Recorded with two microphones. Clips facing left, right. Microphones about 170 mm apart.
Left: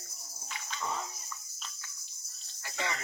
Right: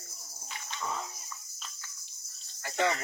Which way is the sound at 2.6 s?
60° right (ahead or behind).